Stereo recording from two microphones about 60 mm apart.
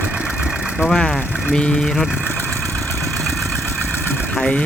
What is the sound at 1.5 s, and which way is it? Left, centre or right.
Speech, centre.